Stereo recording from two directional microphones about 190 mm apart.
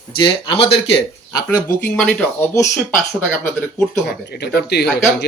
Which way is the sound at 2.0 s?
10° left (ahead or behind).